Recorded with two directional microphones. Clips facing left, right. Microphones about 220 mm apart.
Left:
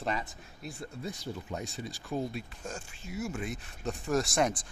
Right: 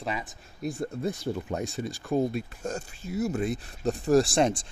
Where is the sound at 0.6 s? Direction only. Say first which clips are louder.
Right 10 dB; 45° right (ahead or behind).